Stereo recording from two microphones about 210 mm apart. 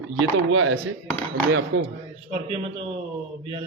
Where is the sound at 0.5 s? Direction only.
65° right (ahead or behind).